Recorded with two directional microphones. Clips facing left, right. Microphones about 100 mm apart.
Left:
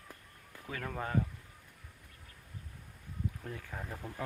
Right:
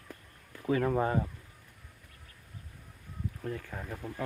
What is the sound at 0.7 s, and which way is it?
Speech, 25° right (ahead or behind).